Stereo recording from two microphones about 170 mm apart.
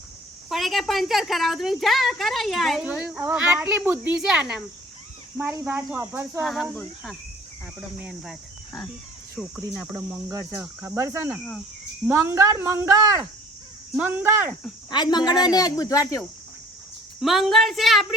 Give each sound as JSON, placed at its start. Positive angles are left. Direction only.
{"t": 0.5, "sound": "a woman's voice", "side_deg": 0}
{"t": 6.4, "sound": "a woman's voice", "side_deg": 0}
{"t": 13.9, "sound": "speech", "side_deg": -10}
{"t": 14.8, "sound": "a woman's voice", "side_deg": 25}
{"t": 17.2, "sound": "a woman's voice", "side_deg": 0}